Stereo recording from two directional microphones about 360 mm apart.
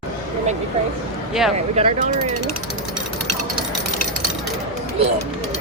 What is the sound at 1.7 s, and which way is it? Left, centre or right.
Speech, centre.